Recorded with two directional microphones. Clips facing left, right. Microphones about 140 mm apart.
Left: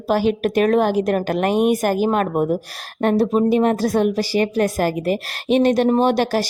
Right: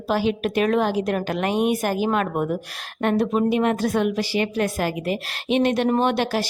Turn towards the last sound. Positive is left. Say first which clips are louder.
# left 4 dB
turn(degrees=40)  # may be behind; listen again after turning